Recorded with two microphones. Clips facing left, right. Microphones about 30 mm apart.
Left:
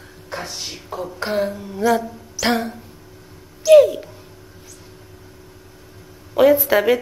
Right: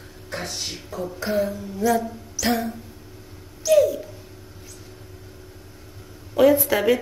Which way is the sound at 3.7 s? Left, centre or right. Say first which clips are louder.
Left 7 dB; left.